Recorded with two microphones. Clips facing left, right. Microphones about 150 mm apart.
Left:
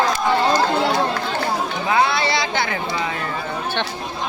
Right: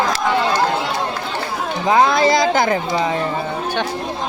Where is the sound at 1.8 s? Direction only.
40° right (ahead or behind).